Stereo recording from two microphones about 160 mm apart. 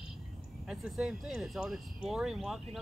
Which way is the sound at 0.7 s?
5° right (ahead or behind).